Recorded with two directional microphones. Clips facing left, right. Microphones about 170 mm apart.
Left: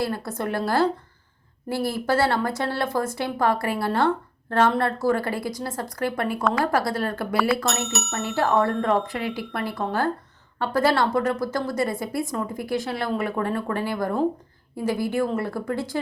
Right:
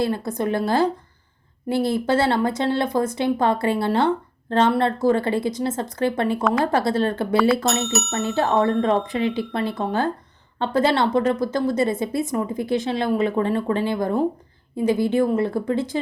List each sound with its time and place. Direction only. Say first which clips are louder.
0.0 s a woman's voice: right 4 dB; 20° right (ahead or behind)
7.3 s speech: right 4 dB; centre (ahead or behind)
8.1 s a woman's voice: right 1 dB; 20° right (ahead or behind)